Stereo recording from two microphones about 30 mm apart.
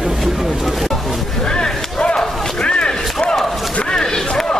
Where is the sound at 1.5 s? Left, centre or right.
Left.